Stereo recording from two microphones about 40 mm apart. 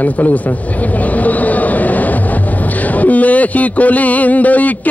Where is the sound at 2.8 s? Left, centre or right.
Left.